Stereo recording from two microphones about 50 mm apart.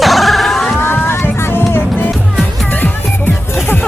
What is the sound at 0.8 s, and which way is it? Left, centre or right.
Music, left.